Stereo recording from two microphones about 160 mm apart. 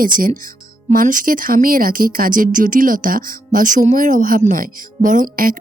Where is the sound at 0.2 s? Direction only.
60° right (ahead or behind).